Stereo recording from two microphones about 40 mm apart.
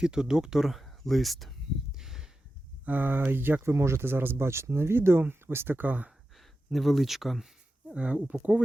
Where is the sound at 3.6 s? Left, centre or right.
Right.